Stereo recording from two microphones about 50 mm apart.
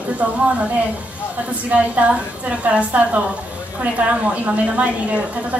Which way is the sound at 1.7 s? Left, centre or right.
Right.